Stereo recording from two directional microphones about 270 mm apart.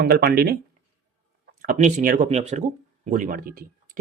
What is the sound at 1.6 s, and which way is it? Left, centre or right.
Speech, right.